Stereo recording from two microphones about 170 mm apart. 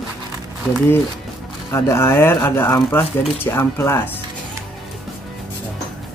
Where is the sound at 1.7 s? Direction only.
15° left (ahead or behind).